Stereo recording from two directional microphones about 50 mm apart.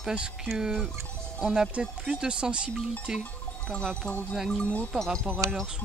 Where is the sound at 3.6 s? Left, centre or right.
Centre.